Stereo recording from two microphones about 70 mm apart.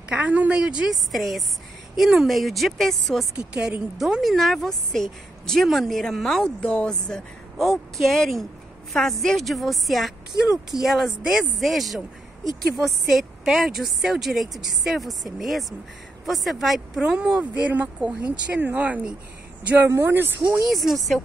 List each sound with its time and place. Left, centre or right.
0.1 s a woman's voice: right
1.1 s a woman's voice: centre
3.3 s a woman's voice: centre
4.0 s a woman's voice: centre
7.5 s a woman's voice: centre; by 19.1 s right
19.9 s speech: right
20.6 s a woman's voice: centre